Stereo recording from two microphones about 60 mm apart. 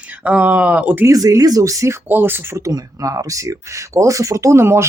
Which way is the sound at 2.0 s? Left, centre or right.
Right.